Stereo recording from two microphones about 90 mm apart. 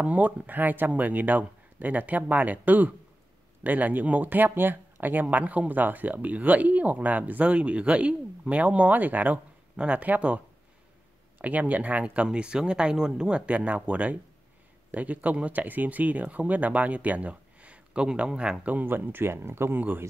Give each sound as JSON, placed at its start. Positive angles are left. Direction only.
{"t": 0.0, "sound": "speech", "side_deg": -15}